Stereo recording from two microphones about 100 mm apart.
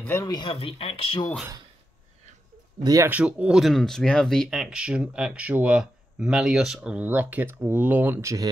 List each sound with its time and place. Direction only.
0.2 s speech: 45° left (ahead or behind)
0.6 s speech: 65° left (ahead or behind)
2.8 s speech: 35° right (ahead or behind)
3.1 s speech: 15° right (ahead or behind)
3.6 s speech: 5° left (ahead or behind); by 8.5 s 30° right (ahead or behind)